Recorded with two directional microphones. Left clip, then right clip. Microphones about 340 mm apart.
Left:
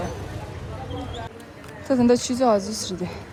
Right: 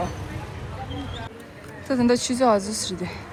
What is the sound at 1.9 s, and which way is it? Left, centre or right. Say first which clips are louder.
A woman's voice: left 2 dB; centre.